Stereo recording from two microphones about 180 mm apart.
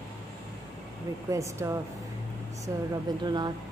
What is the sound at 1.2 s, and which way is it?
Speech, 15° right (ahead or behind).